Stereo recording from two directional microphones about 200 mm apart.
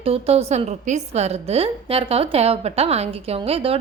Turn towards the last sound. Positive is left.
turn(degrees=-30)  # may be behind; listen again after turning